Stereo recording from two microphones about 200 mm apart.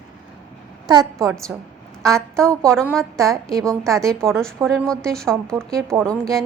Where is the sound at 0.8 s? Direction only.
20° right (ahead or behind).